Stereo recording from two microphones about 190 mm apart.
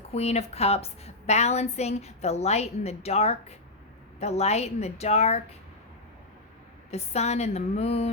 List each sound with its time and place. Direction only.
0.1 s a woman's voice: 35° left (ahead or behind)
6.9 s a woman's voice: 35° left (ahead or behind)